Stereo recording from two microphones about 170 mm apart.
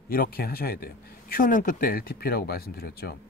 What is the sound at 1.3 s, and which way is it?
Speech, 55° left (ahead or behind).